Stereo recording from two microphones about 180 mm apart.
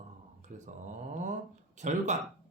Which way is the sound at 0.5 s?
45° right (ahead or behind).